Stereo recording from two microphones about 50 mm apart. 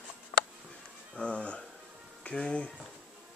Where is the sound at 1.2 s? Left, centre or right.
Left.